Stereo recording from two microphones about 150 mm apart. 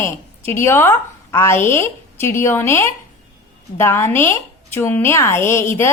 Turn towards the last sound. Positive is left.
turn(degrees=15)  # may be behind; listen again after turning